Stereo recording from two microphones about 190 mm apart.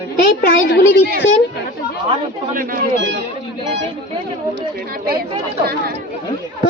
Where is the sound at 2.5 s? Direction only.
45° right (ahead or behind).